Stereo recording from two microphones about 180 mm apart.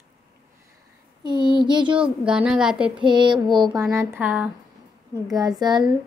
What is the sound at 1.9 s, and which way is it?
Speech, 5° right (ahead or behind).